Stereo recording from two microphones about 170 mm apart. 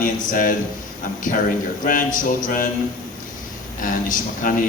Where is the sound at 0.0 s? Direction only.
55° left (ahead or behind).